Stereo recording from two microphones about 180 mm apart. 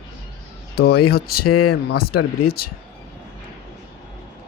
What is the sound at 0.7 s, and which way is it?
Speech, 60° left (ahead or behind).